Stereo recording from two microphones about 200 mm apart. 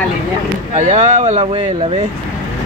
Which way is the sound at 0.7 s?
35° right (ahead or behind).